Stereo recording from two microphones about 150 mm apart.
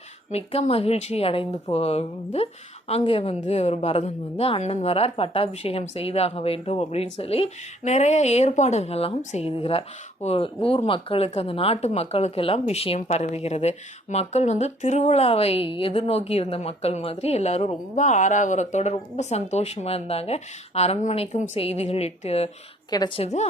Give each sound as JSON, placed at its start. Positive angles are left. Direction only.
{"t": 0.3, "sound": "speech", "side_deg": 45}
{"t": 22.9, "sound": "a woman's voice", "side_deg": 30}